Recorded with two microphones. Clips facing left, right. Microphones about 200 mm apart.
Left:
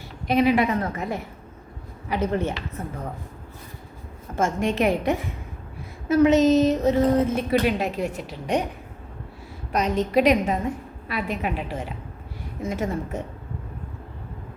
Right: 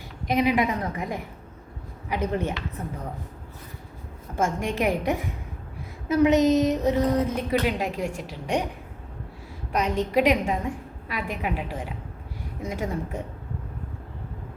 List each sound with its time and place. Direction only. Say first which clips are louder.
0.3 s a woman's voice: left 3 dB; 15° right (ahead or behind)
4.4 s a woman's voice: left 3 dB; 10° right (ahead or behind)
9.7 s a woman's voice: left 2 dB; 15° right (ahead or behind)